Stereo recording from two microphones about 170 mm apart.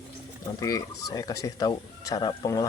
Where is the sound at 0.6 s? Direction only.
20° left (ahead or behind).